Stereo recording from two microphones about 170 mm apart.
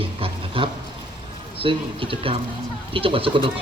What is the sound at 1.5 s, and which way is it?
Speech, 30° right (ahead or behind).